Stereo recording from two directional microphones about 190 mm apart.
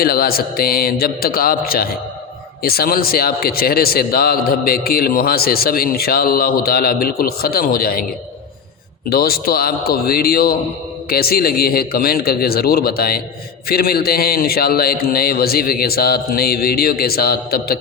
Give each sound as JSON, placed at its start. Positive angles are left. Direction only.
{"t": 0.0, "sound": "a man's voice", "side_deg": 50}
{"t": 9.0, "sound": "a man's voice", "side_deg": 55}